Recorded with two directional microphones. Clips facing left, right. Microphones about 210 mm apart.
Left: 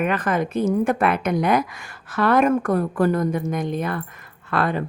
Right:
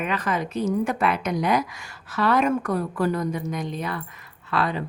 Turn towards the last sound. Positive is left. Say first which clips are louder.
# left 3 dB
turn(degrees=50)  # may be behind; listen again after turning